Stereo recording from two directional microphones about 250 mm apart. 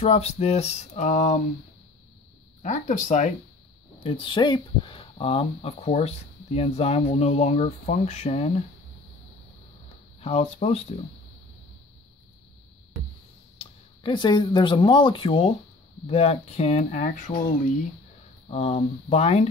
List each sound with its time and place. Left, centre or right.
0.0 s speech: left
2.6 s speech: left
10.2 s speech: left
13.6 s speech: centre
18.5 s speech: left